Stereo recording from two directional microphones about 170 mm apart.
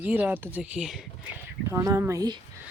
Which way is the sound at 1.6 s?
20° right (ahead or behind).